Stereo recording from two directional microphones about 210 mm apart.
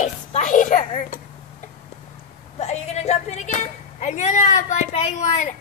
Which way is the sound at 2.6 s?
30° left (ahead or behind).